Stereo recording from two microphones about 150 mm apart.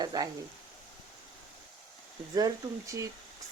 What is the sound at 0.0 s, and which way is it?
Frying, 25° right (ahead or behind).